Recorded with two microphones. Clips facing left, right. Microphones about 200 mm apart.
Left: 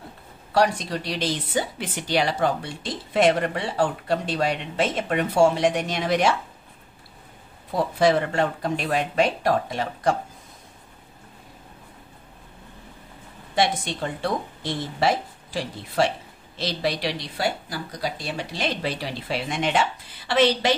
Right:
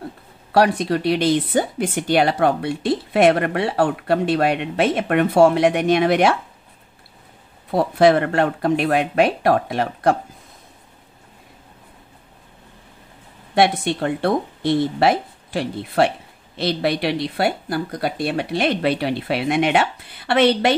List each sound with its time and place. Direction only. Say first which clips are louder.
0.5 s speech: right 5 dB; 60° right (ahead or behind)
7.7 s speech: right 5 dB; 60° right (ahead or behind)
13.6 s speech: right 6 dB; 60° right (ahead or behind)